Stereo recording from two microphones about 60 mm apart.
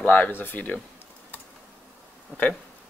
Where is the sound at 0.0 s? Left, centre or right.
Left.